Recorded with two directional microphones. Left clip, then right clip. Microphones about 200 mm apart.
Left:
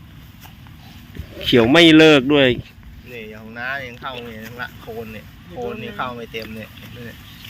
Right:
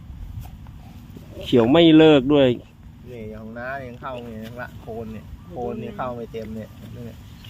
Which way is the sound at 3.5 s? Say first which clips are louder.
Left 5 dB; 45° right (ahead or behind).